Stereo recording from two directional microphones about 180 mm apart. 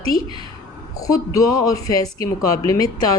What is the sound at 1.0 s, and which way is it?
Speech, 20° left (ahead or behind).